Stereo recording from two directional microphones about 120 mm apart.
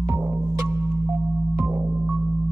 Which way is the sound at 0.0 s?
15° right (ahead or behind).